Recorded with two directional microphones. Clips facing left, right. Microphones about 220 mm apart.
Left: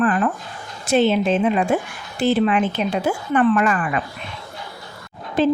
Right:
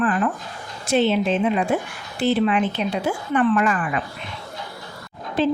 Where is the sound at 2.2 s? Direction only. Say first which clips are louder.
Left 2 dB; 45° left (ahead or behind).